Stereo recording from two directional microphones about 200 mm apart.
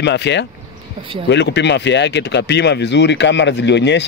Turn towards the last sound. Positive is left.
turn(degrees=60)  # may be behind; listen again after turning